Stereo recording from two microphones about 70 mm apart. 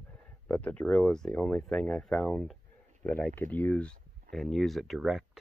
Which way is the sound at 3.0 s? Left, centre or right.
Left.